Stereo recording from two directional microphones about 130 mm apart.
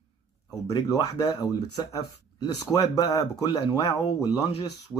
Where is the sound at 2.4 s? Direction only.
30° left (ahead or behind).